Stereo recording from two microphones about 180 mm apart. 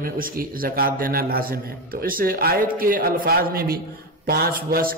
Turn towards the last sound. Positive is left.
turn(degrees=-55)  # may be behind; listen again after turning